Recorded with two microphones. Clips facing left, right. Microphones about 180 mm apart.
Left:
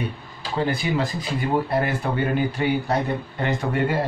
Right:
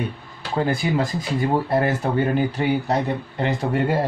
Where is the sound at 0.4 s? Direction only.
65° right (ahead or behind).